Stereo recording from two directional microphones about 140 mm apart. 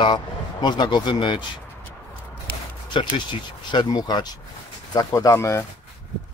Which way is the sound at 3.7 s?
30° left (ahead or behind).